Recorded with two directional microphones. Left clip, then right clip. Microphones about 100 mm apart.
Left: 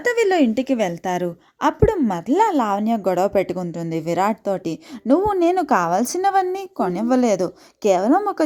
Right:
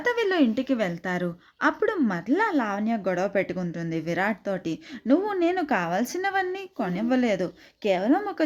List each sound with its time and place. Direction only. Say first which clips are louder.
0.0 s a woman's voice: left 6 dB; 65° left (ahead or behind)